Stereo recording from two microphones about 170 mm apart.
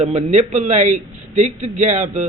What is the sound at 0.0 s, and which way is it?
A man's voice, 40° right (ahead or behind).